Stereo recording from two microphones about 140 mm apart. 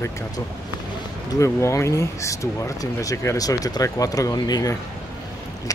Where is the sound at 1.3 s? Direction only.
20° left (ahead or behind).